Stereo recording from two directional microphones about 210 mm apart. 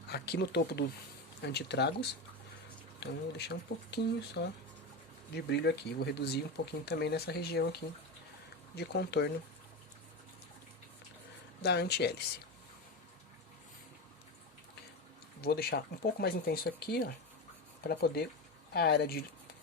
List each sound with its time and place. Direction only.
0.1 s speech: 50° left (ahead or behind)
11.6 s speech: 50° left (ahead or behind)
15.4 s speech: 50° left (ahead or behind)